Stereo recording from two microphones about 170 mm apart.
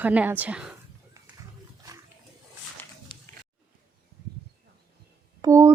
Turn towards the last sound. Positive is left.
turn(degrees=-20)  # may be behind; listen again after turning